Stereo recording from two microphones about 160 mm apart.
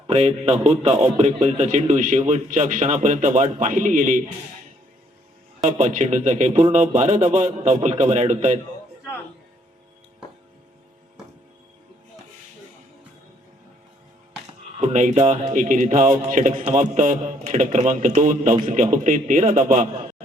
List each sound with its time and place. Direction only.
0.1 s a man's voice: 40° right (ahead or behind)
5.6 s a man's voice: 50° right (ahead or behind)
14.9 s a man's voice: 50° right (ahead or behind)